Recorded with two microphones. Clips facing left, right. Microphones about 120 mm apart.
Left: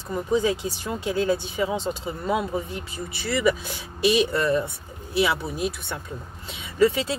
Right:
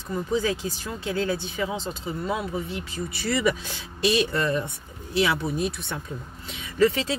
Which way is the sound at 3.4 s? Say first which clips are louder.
Left 2 dB; 10° left (ahead or behind).